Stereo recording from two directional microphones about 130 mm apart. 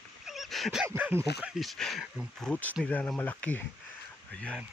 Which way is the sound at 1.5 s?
Centre (ahead or behind).